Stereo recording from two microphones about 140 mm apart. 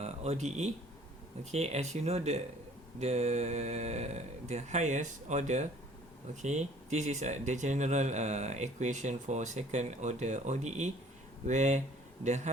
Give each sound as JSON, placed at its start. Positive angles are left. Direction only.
{"t": 0.0, "sound": "speech", "side_deg": -50}